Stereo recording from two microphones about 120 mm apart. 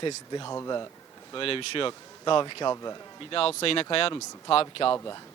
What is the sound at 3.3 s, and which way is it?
Speech, 50° left (ahead or behind).